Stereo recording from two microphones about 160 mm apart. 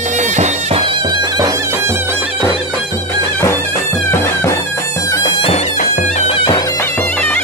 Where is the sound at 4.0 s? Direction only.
15° left (ahead or behind).